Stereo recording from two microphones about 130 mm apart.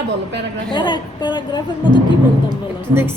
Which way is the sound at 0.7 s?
35° left (ahead or behind).